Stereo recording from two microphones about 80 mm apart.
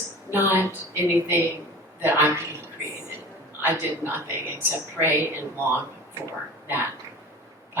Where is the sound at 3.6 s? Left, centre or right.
Right.